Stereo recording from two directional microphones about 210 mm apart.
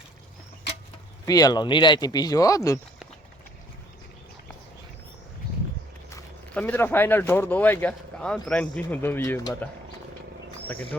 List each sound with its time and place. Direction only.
1.2 s speech: 15° left (ahead or behind)
6.1 s speech: 10° left (ahead or behind)